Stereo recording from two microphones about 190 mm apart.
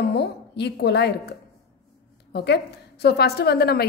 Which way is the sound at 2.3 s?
60° left (ahead or behind).